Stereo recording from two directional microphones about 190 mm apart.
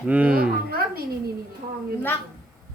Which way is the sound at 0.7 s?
50° right (ahead or behind).